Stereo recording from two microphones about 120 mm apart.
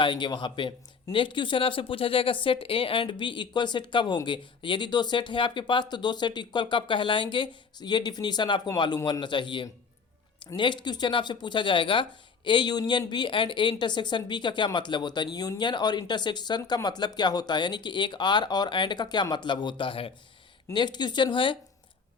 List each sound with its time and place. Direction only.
0.0 s speech: 40° left (ahead or behind)
20.7 s speech: 40° left (ahead or behind)